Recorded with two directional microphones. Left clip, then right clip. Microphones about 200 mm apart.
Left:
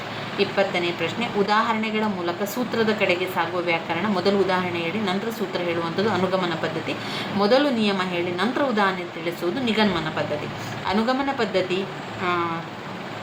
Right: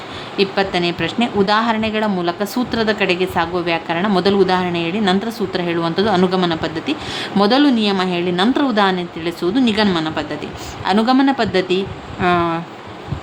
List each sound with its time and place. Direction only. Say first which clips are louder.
0.3 s speech: right 5 dB; 50° right (ahead or behind)